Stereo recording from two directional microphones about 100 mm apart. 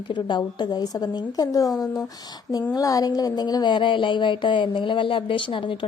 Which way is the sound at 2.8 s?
35° left (ahead or behind).